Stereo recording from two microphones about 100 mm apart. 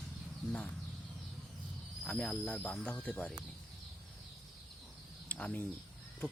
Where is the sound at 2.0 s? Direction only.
10° left (ahead or behind).